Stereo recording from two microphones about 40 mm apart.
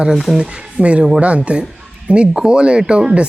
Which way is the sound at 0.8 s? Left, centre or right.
Right.